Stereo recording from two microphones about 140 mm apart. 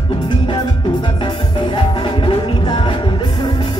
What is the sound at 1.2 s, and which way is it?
Music, 35° left (ahead or behind).